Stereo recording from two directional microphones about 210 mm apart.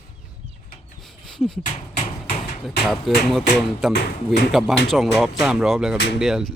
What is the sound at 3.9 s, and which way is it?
Speech, 45° left (ahead or behind).